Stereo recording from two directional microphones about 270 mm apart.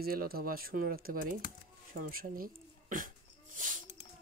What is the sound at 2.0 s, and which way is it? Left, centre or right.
Hiccup, right.